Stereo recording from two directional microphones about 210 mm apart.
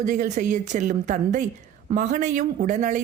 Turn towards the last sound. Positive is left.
turn(degrees=-35)  # may be behind; listen again after turning